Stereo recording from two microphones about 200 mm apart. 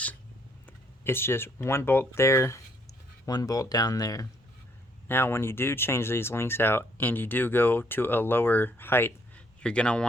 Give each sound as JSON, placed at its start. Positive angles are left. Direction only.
{"t": 1.0, "sound": "speech", "side_deg": 10}